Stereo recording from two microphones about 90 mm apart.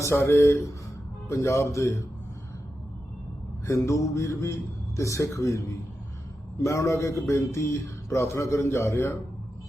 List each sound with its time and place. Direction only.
0.0 s a man's voice: 30° left (ahead or behind)
3.7 s a man's voice: 35° left (ahead or behind)